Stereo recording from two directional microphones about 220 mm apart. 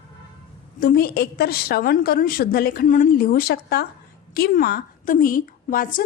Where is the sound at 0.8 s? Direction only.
45° left (ahead or behind).